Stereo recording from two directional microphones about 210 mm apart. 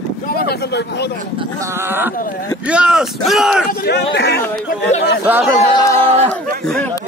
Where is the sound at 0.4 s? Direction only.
50° left (ahead or behind).